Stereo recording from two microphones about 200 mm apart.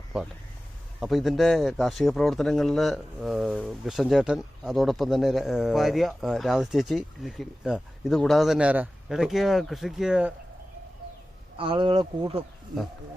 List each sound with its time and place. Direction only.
0.1 s speech: 5° right (ahead or behind)
11.5 s speech: 25° right (ahead or behind)